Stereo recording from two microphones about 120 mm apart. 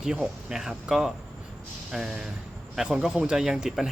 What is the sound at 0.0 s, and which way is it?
Speech, 5° right (ahead or behind).